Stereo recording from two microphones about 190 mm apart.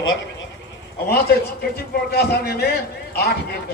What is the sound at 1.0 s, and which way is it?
A man's voice, 60° left (ahead or behind).